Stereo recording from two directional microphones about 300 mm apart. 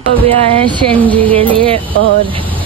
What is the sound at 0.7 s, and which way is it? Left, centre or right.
Speech, centre.